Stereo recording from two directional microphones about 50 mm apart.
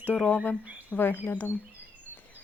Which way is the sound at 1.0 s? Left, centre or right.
Left.